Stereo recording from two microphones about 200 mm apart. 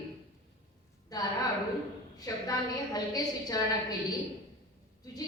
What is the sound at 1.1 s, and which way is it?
A woman's voice, 20° left (ahead or behind).